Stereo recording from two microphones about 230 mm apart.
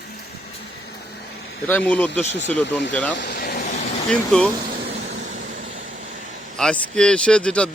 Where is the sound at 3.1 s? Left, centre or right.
Left.